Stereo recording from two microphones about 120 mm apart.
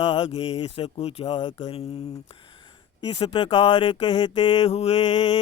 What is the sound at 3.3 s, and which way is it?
A man's voice, 40° left (ahead or behind).